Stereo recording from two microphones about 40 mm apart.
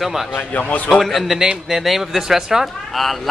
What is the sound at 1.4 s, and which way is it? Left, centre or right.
Speech, centre.